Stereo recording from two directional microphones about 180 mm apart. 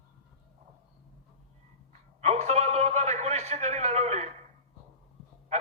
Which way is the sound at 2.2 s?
35° right (ahead or behind).